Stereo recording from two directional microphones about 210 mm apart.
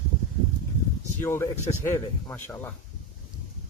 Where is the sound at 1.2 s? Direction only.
10° left (ahead or behind).